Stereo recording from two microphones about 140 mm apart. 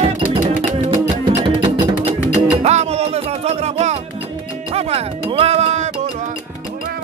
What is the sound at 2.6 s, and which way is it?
Music, 50° right (ahead or behind).